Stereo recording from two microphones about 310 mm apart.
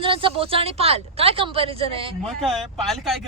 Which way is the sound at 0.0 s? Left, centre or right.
Centre.